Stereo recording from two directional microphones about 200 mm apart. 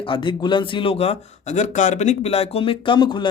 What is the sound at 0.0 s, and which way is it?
Speech, 25° left (ahead or behind).